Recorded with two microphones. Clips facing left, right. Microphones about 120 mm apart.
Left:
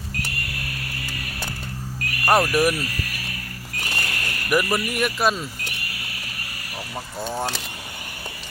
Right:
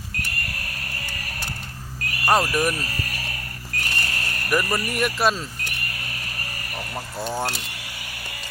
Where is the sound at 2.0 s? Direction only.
25° right (ahead or behind).